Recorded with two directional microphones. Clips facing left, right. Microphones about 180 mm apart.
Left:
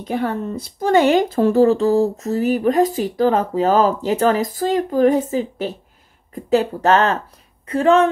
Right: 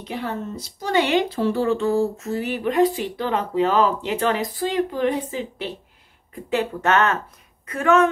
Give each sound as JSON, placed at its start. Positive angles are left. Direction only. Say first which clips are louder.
{"t": 0.0, "sound": "speech", "louder": "left 6 dB", "side_deg": 50}